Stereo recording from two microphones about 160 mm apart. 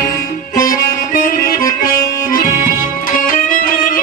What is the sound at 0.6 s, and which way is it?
Music, 60° left (ahead or behind).